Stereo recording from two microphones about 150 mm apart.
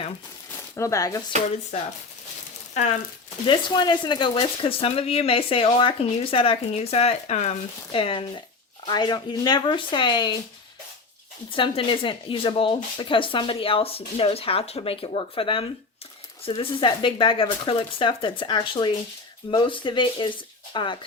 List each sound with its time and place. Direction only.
0.8 s speech: 20° left (ahead or behind)
3.4 s speech: 30° left (ahead or behind); by 7.5 s 50° left (ahead or behind)
7.9 s speech: 35° left (ahead or behind)
11.5 s speech: 35° left (ahead or behind)